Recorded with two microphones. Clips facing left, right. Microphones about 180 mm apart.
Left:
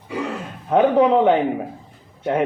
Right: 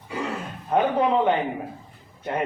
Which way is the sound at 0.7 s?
65° left (ahead or behind).